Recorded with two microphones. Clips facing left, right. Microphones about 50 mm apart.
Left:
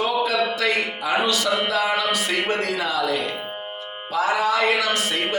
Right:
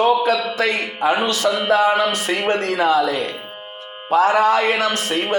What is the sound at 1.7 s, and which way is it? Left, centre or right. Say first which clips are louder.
A man's voice: right 6 dB; right.